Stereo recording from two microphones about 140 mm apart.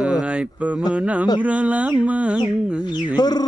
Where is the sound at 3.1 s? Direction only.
30° left (ahead or behind).